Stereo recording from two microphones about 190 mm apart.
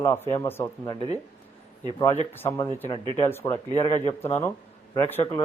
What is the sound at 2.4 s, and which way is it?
Speech, 15° left (ahead or behind).